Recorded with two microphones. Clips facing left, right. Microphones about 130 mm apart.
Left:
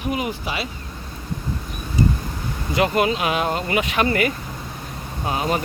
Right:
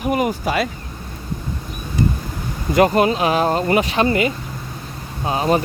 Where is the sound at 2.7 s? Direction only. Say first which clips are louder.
Right 5 dB; 40° right (ahead or behind).